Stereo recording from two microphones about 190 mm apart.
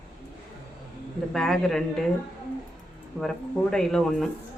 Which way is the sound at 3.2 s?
5° right (ahead or behind).